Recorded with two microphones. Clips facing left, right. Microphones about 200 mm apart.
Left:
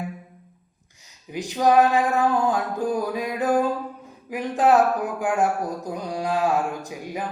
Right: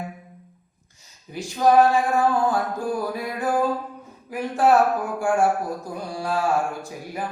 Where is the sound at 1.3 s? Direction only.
15° left (ahead or behind).